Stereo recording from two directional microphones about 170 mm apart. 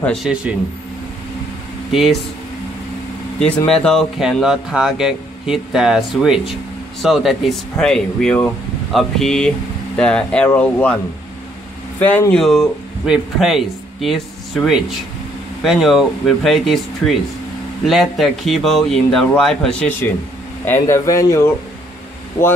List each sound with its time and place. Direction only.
0.0 s speech: centre (ahead or behind)
1.9 s speech: centre (ahead or behind)
3.3 s speech: 5° left (ahead or behind)
12.0 s speech: 10° left (ahead or behind)
20.6 s speech: 15° left (ahead or behind)